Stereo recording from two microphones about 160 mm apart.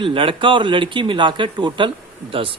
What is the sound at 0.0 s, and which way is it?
Speech, 35° right (ahead or behind).